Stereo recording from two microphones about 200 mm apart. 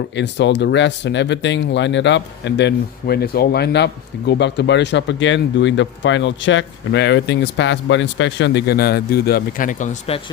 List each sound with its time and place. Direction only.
0.2 s speech: 60° left (ahead or behind); by 9.9 s 40° left (ahead or behind)